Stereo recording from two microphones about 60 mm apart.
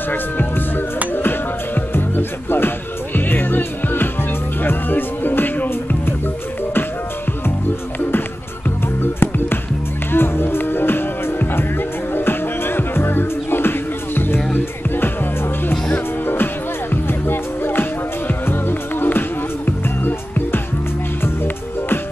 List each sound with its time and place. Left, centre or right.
0.1 s speech: left
1.1 s music: left
9.0 s music: left
16.9 s music: left